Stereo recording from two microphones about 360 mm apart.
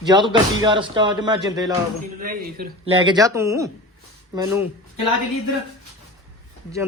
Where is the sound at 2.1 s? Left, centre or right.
Right.